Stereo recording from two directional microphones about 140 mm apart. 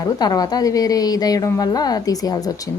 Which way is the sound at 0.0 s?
30° left (ahead or behind).